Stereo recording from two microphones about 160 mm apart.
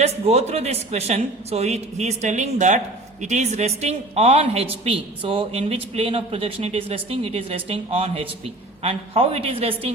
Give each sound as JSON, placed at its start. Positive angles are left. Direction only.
{"t": 0.0, "sound": "a woman's voice", "side_deg": -40}